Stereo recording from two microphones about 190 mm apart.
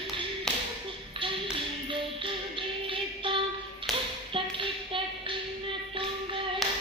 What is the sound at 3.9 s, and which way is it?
Tap, centre (ahead or behind).